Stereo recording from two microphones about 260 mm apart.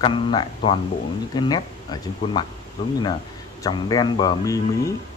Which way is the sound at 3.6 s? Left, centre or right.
Centre.